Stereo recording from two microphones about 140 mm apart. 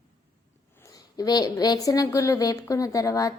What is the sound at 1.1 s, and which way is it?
A woman's voice, 30° left (ahead or behind).